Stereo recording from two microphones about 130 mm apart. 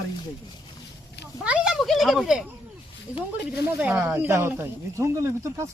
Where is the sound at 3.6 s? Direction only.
10° right (ahead or behind).